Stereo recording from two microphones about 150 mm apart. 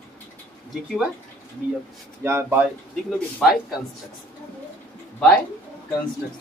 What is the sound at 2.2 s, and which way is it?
Speech, 15° right (ahead or behind).